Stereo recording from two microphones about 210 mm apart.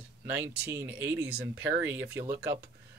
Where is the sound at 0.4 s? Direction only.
10° right (ahead or behind).